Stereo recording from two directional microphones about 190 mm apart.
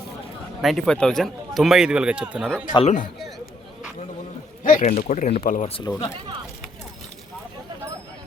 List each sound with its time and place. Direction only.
0.6 s a man's voice: centre (ahead or behind)
2.7 s speech: 40° left (ahead or behind)
4.6 s speech: 45° left (ahead or behind)
5.6 s speech: 30° left (ahead or behind)